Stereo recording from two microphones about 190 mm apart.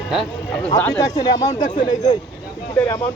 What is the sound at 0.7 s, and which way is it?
A man's voice, 15° left (ahead or behind).